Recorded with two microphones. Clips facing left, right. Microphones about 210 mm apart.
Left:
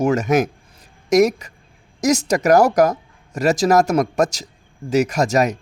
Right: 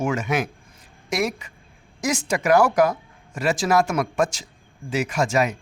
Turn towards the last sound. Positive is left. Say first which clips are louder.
# left 4 dB
turn(degrees=40)  # may be behind; listen again after turning